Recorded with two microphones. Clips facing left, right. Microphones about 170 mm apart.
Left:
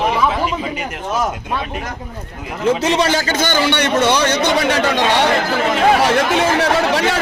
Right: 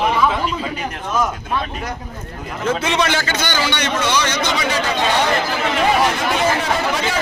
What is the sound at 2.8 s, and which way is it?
A man's voice, 40° left (ahead or behind).